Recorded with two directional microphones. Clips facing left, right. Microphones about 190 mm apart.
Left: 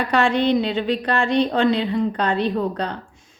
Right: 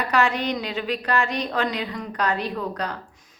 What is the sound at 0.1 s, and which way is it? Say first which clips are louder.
A woman's voice: left 6 dB; 30° left (ahead or behind).